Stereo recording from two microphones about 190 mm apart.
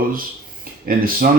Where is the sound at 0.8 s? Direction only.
50° right (ahead or behind).